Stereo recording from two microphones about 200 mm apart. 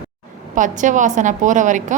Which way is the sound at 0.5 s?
40° right (ahead or behind).